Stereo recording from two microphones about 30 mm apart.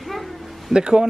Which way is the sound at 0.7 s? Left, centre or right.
Right.